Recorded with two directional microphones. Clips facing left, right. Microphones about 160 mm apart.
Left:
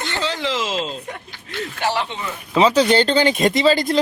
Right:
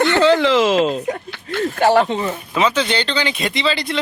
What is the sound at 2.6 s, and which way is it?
Speech, 40° left (ahead or behind).